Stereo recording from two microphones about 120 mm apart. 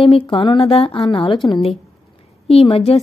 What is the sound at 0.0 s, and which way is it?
Speech, 45° left (ahead or behind).